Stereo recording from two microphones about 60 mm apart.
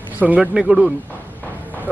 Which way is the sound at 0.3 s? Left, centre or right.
Centre.